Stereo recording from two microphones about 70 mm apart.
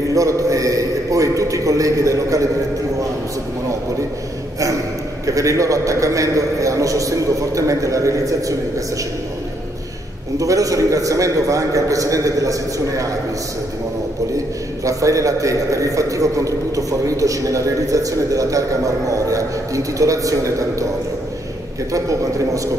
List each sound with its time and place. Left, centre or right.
0.1 s a man's voice: right
5.2 s a man's voice: right
10.4 s a man's voice: right
14.9 s a man's voice: right